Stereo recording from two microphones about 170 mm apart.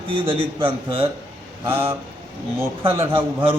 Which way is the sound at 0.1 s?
30° right (ahead or behind).